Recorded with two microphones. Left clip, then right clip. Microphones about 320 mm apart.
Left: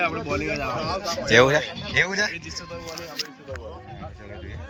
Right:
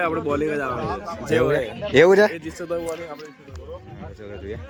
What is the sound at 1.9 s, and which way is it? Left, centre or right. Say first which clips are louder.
Speech: right 12 dB; centre.